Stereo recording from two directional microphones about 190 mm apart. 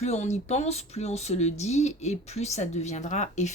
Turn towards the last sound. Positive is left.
turn(degrees=40)  # may be behind; listen again after turning